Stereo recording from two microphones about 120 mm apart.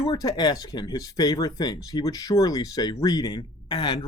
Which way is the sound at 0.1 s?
30° left (ahead or behind).